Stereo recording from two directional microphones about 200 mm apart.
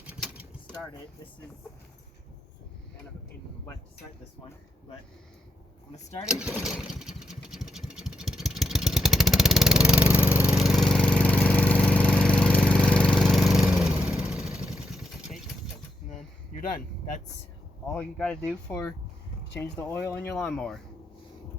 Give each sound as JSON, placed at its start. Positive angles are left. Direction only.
{"t": 6.2, "sound": "vehicle", "side_deg": -5}
{"t": 16.5, "sound": "vehicle", "side_deg": 45}
{"t": 17.9, "sound": "speech", "side_deg": 5}